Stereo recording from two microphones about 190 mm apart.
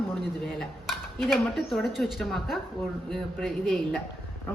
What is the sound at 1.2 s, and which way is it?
A woman's voice, centre (ahead or behind).